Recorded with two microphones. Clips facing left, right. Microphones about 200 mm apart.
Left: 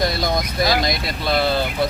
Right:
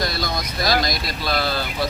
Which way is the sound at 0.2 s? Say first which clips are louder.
Left 5 dB; 20° left (ahead or behind).